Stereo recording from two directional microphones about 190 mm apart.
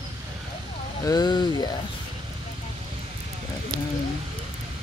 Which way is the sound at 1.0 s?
20° left (ahead or behind).